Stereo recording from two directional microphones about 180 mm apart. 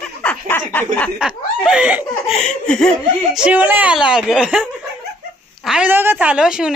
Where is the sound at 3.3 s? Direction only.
5° right (ahead or behind).